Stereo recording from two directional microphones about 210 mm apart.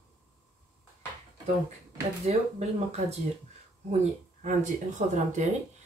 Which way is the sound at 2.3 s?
30° right (ahead or behind).